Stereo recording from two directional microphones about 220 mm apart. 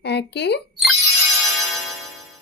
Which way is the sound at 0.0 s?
50° left (ahead or behind).